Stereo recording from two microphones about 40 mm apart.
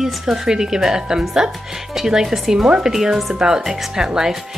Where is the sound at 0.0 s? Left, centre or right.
Centre.